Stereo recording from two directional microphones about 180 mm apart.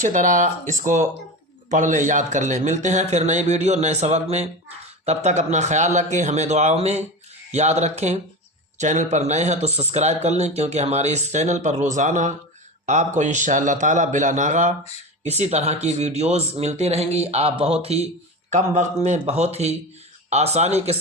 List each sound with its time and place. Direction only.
0.0 s a man's voice: 45° right (ahead or behind)